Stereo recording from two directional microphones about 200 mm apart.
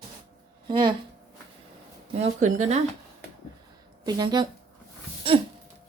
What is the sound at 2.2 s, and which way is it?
Speech, 35° right (ahead or behind).